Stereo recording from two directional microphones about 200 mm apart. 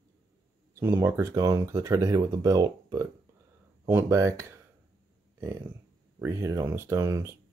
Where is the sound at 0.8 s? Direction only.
15° right (ahead or behind).